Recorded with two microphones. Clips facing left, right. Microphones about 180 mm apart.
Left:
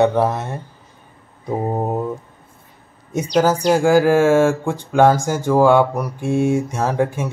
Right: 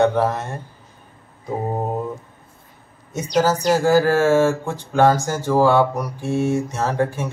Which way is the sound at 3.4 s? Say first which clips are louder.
Left 2 dB; 10° left (ahead or behind).